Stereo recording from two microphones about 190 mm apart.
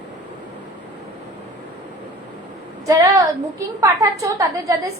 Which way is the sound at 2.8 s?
20° right (ahead or behind).